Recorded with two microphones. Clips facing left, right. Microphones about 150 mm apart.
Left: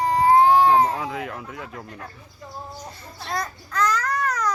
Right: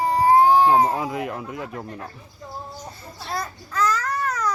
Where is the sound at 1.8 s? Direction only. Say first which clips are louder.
Right 4 dB; 20° right (ahead or behind).